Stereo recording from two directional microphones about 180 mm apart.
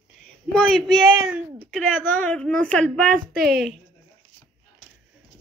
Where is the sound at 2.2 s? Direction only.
5° left (ahead or behind).